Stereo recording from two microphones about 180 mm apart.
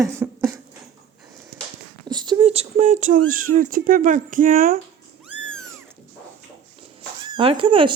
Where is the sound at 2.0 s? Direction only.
25° right (ahead or behind); by 4.8 s 50° right (ahead or behind).